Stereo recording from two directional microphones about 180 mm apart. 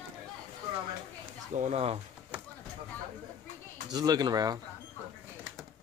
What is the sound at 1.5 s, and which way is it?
Speech, 40° right (ahead or behind).